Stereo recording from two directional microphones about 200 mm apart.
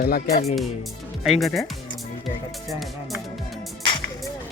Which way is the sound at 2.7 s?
Centre (ahead or behind).